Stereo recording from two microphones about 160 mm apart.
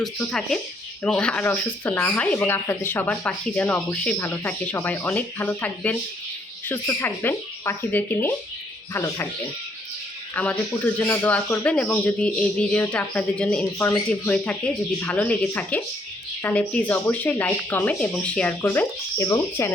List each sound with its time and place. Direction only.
0.0 s speech: 5° left (ahead or behind)
10.3 s speech: 10° left (ahead or behind)